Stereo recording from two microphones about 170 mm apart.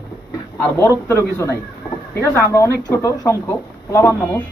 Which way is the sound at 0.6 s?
15° left (ahead or behind).